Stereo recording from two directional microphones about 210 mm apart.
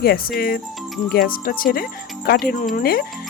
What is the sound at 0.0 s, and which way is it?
Speech, 45° left (ahead or behind).